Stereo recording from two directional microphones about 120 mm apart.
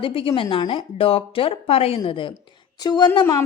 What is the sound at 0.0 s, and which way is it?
A woman's voice, 50° left (ahead or behind).